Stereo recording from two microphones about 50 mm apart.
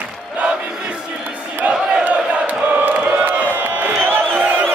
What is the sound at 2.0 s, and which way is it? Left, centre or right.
Battle cry, right.